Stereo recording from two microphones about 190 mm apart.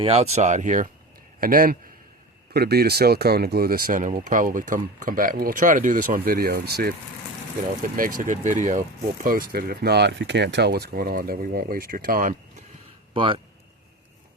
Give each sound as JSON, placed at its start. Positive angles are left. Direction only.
{"t": 0.0, "sound": "speech", "side_deg": -30}
{"t": 8.2, "sound": "speech", "side_deg": -40}
{"t": 13.1, "sound": "speech", "side_deg": -30}